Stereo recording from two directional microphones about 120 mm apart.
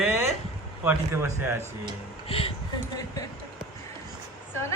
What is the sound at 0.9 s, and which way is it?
Speech, 20° right (ahead or behind).